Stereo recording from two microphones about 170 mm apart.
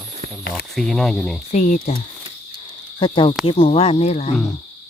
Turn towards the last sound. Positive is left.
turn(degrees=40)  # may be behind; listen again after turning